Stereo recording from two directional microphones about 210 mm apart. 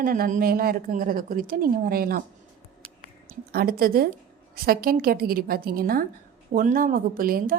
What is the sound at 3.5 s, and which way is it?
A woman's voice, 45° right (ahead or behind).